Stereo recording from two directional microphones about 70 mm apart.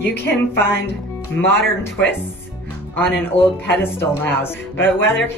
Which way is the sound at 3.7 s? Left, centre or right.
Left.